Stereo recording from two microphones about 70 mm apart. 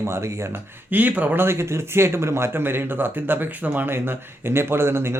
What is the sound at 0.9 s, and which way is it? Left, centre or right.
Speech, right.